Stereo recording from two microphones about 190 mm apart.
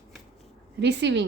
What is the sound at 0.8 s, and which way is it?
Speech, 65° right (ahead or behind).